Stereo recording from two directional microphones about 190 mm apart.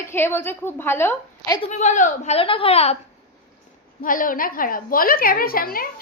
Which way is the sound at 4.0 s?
45° left (ahead or behind).